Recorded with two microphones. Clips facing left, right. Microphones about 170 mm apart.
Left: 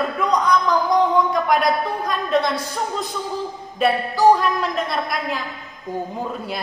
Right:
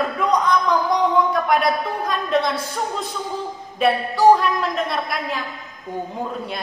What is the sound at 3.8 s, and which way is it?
A woman's voice, centre (ahead or behind).